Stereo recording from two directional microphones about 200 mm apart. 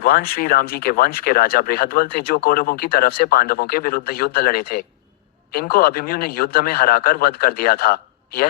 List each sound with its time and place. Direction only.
0.0 s speech: 50° left (ahead or behind)